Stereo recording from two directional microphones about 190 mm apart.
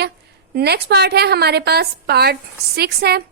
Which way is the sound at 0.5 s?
60° right (ahead or behind).